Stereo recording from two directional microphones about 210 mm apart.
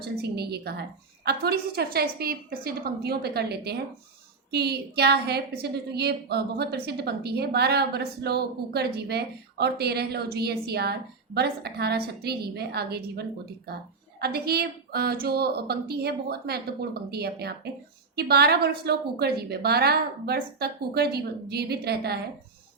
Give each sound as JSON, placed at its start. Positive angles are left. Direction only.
{"t": 0.0, "sound": "a woman's voice", "side_deg": -50}